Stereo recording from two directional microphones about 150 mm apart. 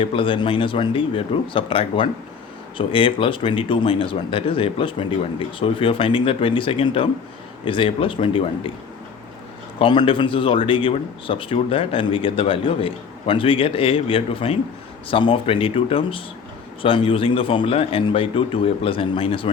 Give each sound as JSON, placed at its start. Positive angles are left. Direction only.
{"t": 0.0, "sound": "a man's voice", "side_deg": 35}
{"t": 9.7, "sound": "a man's voice", "side_deg": 30}